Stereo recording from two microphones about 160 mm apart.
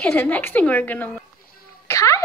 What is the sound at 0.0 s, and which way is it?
A woman's voice, 10° left (ahead or behind).